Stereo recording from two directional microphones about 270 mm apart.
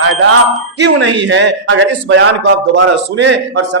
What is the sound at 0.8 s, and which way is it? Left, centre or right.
A man's voice, right.